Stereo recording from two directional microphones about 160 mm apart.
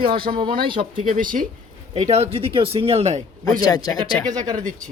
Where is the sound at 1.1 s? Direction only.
55° right (ahead or behind).